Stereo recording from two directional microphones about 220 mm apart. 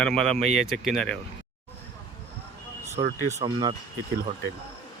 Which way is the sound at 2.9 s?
30° right (ahead or behind).